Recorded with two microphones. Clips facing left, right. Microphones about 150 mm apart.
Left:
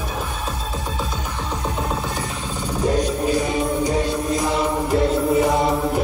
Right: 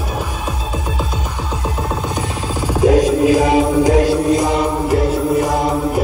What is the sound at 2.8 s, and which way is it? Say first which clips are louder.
Music: right 8 dB; 90° right.